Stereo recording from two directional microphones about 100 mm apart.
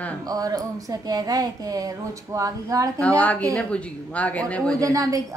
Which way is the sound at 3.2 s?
15° left (ahead or behind).